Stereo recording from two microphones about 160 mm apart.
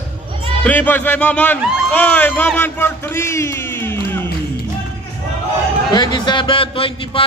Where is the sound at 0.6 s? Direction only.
10° left (ahead or behind).